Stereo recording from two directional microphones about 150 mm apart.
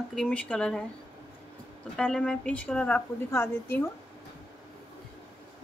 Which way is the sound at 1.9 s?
5° left (ahead or behind).